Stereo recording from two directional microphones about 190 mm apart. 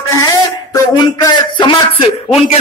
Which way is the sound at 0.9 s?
20° left (ahead or behind).